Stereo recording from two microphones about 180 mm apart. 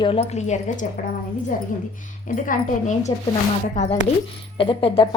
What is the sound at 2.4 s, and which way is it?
A woman's voice, 40° left (ahead or behind).